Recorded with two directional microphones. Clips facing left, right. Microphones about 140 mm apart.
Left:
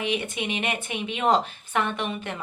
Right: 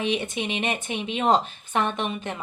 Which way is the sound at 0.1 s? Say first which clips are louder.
Right 1 dB; 25° right (ahead or behind).